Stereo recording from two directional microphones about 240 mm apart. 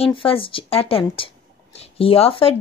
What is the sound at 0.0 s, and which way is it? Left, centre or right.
A woman's voice, left.